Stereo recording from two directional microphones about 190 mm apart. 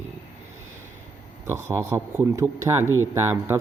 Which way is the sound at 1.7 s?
15° right (ahead or behind).